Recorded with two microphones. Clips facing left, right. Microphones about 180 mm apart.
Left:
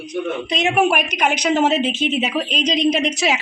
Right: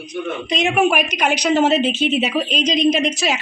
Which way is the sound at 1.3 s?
35° right (ahead or behind).